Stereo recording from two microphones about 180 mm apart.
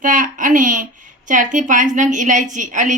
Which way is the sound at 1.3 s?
45° right (ahead or behind).